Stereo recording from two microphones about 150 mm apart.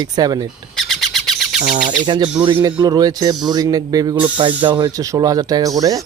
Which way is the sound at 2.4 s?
35° right (ahead or behind).